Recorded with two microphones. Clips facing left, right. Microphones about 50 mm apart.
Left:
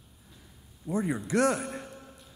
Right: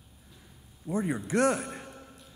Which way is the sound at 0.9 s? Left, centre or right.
Centre.